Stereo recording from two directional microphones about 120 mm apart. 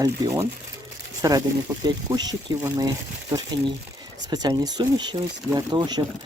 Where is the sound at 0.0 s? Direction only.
25° right (ahead or behind).